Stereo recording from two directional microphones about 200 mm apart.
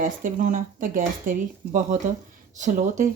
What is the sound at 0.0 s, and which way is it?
Speech, 40° right (ahead or behind).